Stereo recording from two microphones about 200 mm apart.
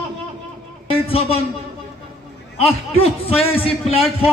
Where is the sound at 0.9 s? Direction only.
30° left (ahead or behind).